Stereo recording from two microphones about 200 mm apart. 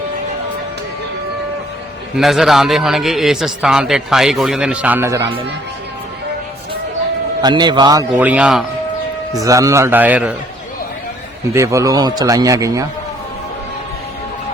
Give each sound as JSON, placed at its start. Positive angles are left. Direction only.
{"t": 2.1, "sound": "a man's voice", "side_deg": 0}
{"t": 7.4, "sound": "a man's voice", "side_deg": -25}
{"t": 8.1, "sound": "speech", "side_deg": -5}
{"t": 9.3, "sound": "speech", "side_deg": -15}
{"t": 11.5, "sound": "speech", "side_deg": -15}